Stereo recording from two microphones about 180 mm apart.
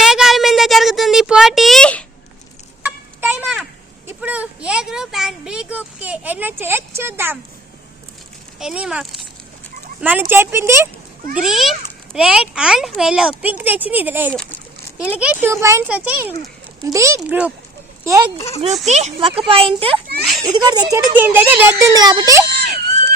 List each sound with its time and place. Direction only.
0.0 s child singing: centre (ahead or behind)
2.8 s a sound: 10° right (ahead or behind)
8.5 s a child's voice: 5° right (ahead or behind)
11.3 s a child's voice: centre (ahead or behind)
17.2 s a child's voice: 5° right (ahead or behind)
18.0 s a child's voice: 15° right (ahead or behind)
18.9 s speech: 40° right (ahead or behind)
20.9 s speech: 10° right (ahead or behind)